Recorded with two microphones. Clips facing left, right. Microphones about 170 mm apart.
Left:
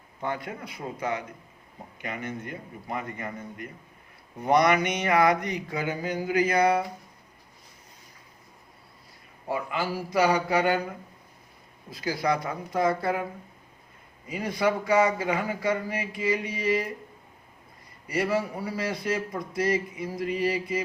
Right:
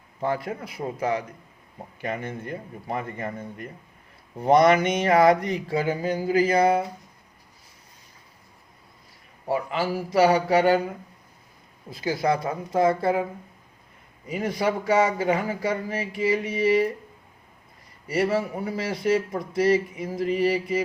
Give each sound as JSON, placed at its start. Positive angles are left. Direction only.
{"t": 0.2, "sound": "a man's voice", "side_deg": -30}
{"t": 9.5, "sound": "speech", "side_deg": -30}
{"t": 11.9, "sound": "speech", "side_deg": -25}
{"t": 14.3, "sound": "speech", "side_deg": -25}
{"t": 18.1, "sound": "speech", "side_deg": -25}